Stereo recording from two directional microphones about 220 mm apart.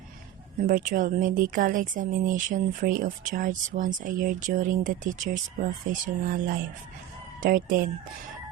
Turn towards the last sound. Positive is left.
turn(degrees=-40)  # may be behind; listen again after turning